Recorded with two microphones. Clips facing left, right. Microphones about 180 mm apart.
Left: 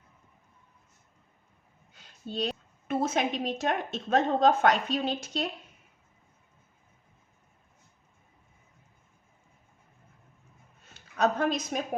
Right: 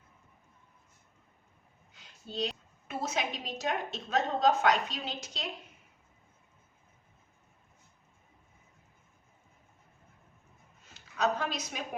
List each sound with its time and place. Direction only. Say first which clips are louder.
2.0 s a woman's voice: left 2 dB; 55° left (ahead or behind)
10.9 s a woman's voice: left 4 dB; 50° left (ahead or behind)